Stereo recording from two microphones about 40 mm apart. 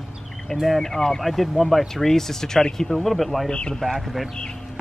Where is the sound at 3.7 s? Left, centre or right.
Centre.